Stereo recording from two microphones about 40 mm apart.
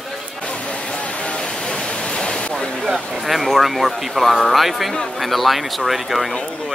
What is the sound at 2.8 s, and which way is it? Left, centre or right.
Speech, centre.